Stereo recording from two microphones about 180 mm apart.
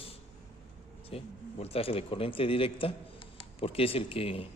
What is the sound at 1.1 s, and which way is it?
A man's voice, 35° left (ahead or behind).